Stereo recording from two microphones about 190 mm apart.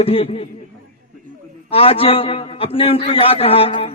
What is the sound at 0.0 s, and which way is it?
Speech, 30° left (ahead or behind).